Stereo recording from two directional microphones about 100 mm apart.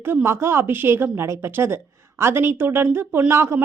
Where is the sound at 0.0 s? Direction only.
25° right (ahead or behind).